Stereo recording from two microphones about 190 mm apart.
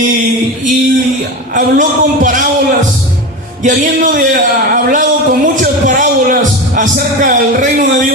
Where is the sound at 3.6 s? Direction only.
45° right (ahead or behind).